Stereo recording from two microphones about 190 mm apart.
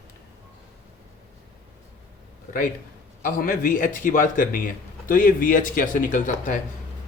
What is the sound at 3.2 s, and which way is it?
A man's voice, 45° left (ahead or behind).